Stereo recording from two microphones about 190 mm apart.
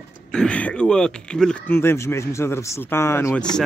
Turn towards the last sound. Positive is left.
turn(degrees=10)  # may be behind; listen again after turning